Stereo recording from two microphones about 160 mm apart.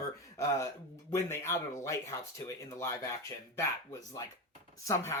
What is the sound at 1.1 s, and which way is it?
Speech, 15° left (ahead or behind).